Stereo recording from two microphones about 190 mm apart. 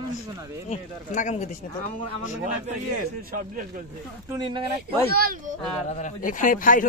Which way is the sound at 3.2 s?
45° right (ahead or behind).